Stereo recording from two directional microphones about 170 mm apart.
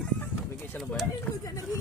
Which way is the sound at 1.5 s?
20° left (ahead or behind).